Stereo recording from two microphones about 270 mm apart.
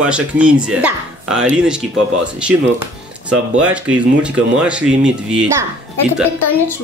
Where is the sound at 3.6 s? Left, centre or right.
Centre.